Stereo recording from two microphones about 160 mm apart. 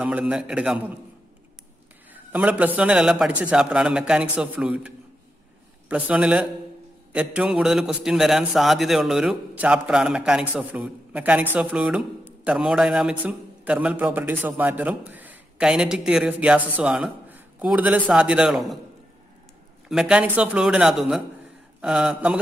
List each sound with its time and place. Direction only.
0.0 s a man's voice: 5° right (ahead or behind)
2.1 s a man's voice: 10° right (ahead or behind)
19.9 s a man's voice: 5° right (ahead or behind)